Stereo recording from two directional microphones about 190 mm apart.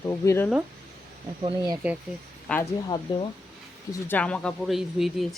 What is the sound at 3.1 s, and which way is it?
Speech, 25° left (ahead or behind).